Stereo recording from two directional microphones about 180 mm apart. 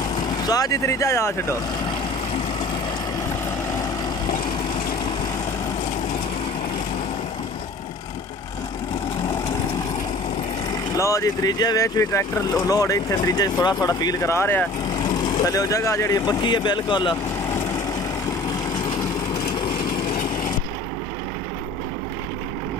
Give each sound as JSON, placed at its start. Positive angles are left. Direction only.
{"t": 0.5, "sound": "speech", "side_deg": 20}
{"t": 11.0, "sound": "speech", "side_deg": 15}